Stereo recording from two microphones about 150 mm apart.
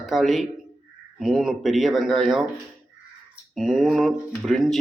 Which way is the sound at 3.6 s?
Centre (ahead or behind).